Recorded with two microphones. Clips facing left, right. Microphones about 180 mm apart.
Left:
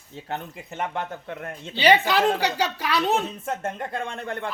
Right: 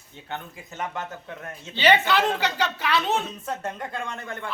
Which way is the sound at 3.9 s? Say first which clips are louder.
Left 3 dB; 30° left (ahead or behind).